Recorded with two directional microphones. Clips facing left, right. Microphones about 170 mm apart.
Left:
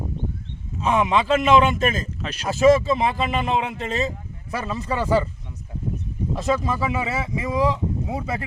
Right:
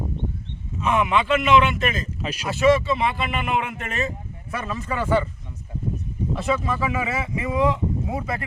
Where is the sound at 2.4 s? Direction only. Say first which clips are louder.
Left 3 dB; 40° left (ahead or behind).